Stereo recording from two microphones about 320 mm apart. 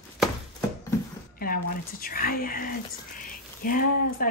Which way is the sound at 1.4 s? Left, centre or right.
Left.